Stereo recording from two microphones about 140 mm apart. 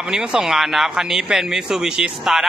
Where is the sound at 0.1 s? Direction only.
5° right (ahead or behind).